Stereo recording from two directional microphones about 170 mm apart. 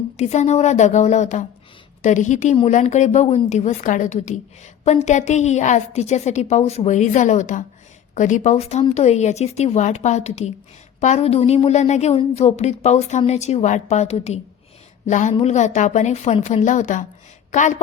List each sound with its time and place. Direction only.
0.2 s a woman's voice: 40° left (ahead or behind)